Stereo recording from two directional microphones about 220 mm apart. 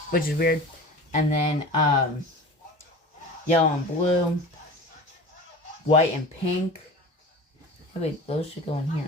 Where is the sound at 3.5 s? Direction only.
30° left (ahead or behind).